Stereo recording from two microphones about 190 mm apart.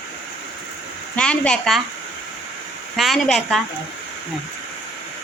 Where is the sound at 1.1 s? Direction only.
5° left (ahead or behind).